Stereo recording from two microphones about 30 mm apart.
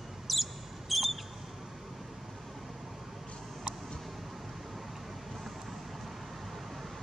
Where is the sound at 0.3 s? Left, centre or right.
Centre.